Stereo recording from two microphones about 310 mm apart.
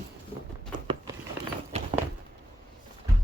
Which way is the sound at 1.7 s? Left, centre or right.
Right.